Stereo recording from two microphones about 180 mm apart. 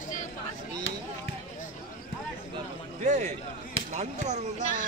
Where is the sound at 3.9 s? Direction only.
40° right (ahead or behind).